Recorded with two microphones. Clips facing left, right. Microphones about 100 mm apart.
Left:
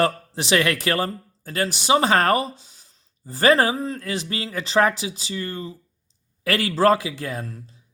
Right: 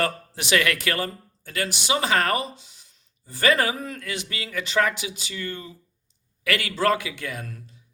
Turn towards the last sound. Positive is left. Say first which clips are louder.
# left 4 dB
turn(degrees=30)  # may be behind; listen again after turning